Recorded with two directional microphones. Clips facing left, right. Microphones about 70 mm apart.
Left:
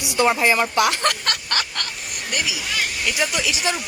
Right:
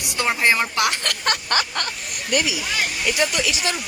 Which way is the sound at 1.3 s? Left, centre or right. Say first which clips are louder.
Right 3 dB; right.